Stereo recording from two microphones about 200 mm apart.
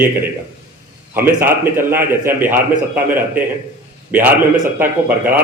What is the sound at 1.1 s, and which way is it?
A man's voice, 10° right (ahead or behind).